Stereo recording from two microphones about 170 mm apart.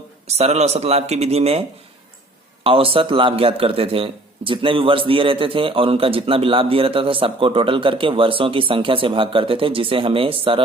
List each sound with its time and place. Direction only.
0.3 s a man's voice: 40° right (ahead or behind)
2.6 s a man's voice: 35° right (ahead or behind)